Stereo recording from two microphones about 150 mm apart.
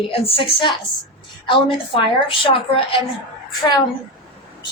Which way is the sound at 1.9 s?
35° left (ahead or behind).